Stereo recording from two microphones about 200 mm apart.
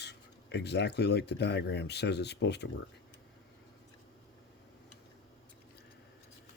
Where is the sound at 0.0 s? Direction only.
55° left (ahead or behind).